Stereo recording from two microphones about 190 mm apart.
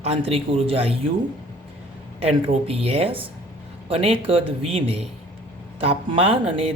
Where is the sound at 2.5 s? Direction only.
30° right (ahead or behind).